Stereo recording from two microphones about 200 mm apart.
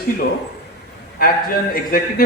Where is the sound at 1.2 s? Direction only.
50° left (ahead or behind).